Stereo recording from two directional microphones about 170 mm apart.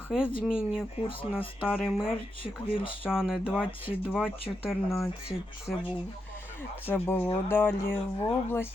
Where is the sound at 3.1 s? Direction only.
5° right (ahead or behind).